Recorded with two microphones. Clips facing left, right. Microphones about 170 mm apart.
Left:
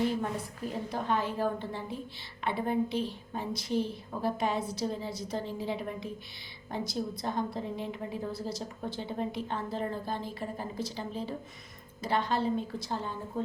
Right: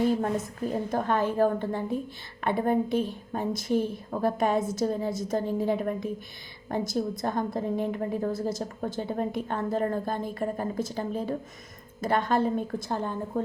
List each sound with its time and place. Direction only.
0.2 s a woman's voice: 45° right (ahead or behind)